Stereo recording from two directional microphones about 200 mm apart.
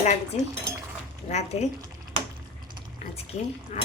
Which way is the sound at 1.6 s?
30° left (ahead or behind).